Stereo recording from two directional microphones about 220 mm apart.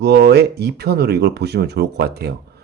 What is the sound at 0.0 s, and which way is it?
Speech, 50° right (ahead or behind).